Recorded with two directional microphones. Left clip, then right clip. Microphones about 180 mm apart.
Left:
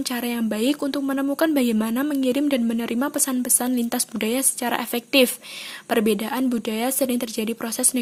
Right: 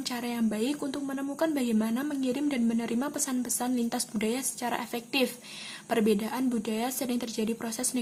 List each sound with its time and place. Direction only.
0.0 s speech: 30° left (ahead or behind)